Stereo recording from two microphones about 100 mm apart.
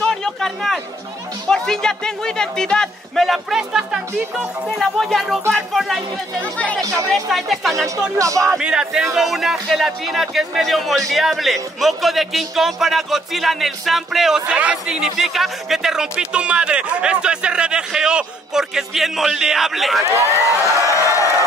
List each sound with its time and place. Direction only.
0.0 s a sound: 5° left (ahead or behind)
1.5 s speech: 5° left (ahead or behind)
6.4 s speech: 15° left (ahead or behind)
7.1 s speech: centre (ahead or behind)
8.2 s speech: 30° right (ahead or behind)
8.5 s speech: 10° right (ahead or behind)
20.0 s speech: 30° right (ahead or behind)
20.6 s a sound: 30° left (ahead or behind)